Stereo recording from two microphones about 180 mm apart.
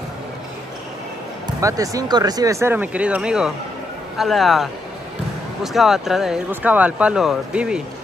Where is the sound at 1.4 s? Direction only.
20° right (ahead or behind).